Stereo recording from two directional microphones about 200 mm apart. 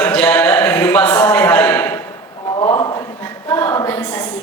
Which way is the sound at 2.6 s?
20° left (ahead or behind).